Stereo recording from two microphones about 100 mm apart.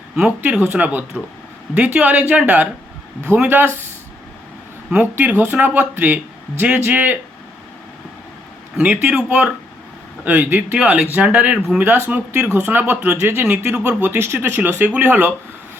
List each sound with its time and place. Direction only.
0.2 s speech: 10° right (ahead or behind)
4.9 s speech: 15° right (ahead or behind)
8.8 s speech: 10° right (ahead or behind)